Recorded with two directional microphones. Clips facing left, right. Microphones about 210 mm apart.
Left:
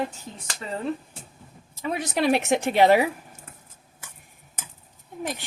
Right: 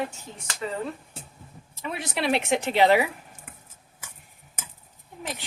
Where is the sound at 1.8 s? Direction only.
40° left (ahead or behind).